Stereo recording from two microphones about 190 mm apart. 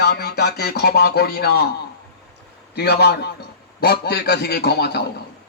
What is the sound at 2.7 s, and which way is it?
A man's voice, 55° left (ahead or behind).